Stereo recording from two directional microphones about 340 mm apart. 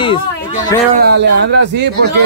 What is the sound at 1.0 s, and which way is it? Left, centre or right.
Speech, right.